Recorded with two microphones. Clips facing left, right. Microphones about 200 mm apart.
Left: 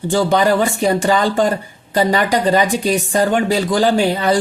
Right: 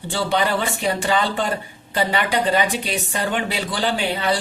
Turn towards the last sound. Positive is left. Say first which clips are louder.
# left 7 dB
turn(degrees=40)  # may be behind; listen again after turning